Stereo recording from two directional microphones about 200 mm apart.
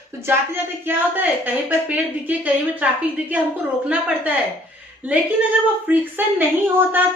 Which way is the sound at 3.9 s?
5° right (ahead or behind).